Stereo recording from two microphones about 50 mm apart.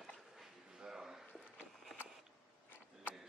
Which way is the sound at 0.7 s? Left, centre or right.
Centre.